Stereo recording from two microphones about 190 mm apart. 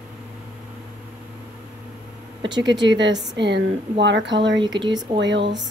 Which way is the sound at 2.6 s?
70° right (ahead or behind).